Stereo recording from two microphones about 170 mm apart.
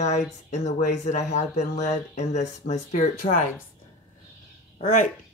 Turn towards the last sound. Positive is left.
turn(degrees=55)  # may be behind; listen again after turning